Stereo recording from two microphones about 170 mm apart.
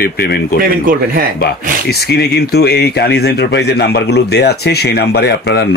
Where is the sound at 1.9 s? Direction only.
70° left (ahead or behind).